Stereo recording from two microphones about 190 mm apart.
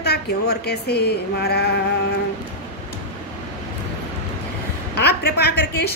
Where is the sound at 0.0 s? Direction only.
60° left (ahead or behind).